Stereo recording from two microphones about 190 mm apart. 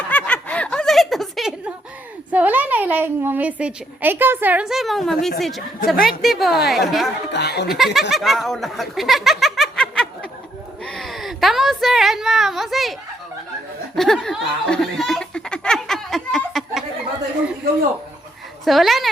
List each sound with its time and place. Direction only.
0.1 s snicker: 5° left (ahead or behind)
2.3 s a woman's voice: 10° right (ahead or behind)
7.3 s speech: 60° left (ahead or behind)
8.1 s a woman's voice: centre (ahead or behind)
13.9 s laughter: centre (ahead or behind)
18.6 s a woman's voice: centre (ahead or behind)